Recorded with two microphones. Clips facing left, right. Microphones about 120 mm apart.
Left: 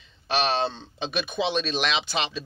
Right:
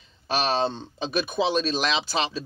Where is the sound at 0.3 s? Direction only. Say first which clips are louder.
Right 1 dB; 40° right (ahead or behind).